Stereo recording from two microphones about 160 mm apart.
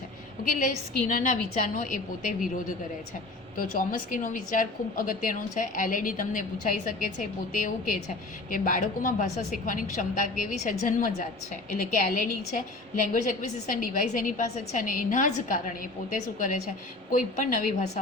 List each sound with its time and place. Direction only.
0.4 s a woman's voice: 55° left (ahead or behind)
3.6 s a woman's voice: 60° left (ahead or behind)